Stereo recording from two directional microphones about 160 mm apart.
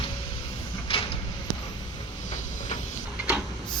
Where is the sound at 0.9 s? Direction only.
35° left (ahead or behind).